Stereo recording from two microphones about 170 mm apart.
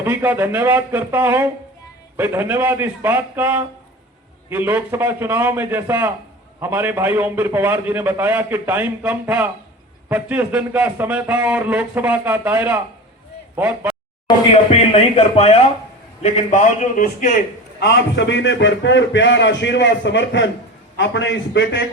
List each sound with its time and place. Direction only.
0.0 s a man's voice: 10° right (ahead or behind)
14.5 s a man's voice: 35° left (ahead or behind)
17.7 s a man's voice: 80° left